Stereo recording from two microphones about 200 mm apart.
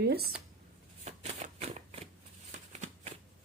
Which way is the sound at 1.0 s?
35° right (ahead or behind).